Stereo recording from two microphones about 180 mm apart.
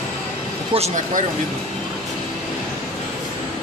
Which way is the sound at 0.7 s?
45° right (ahead or behind).